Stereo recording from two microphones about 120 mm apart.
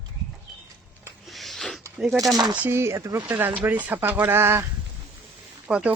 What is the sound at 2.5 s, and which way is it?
Speech, 15° right (ahead or behind).